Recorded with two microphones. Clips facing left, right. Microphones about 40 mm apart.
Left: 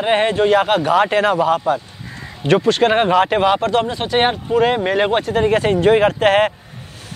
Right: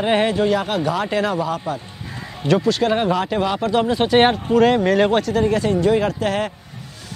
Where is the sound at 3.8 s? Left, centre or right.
Centre.